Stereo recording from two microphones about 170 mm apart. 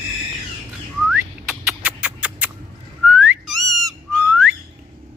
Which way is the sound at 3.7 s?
20° right (ahead or behind).